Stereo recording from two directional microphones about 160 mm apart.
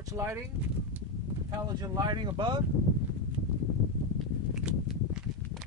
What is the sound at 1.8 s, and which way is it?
Speech, 25° right (ahead or behind).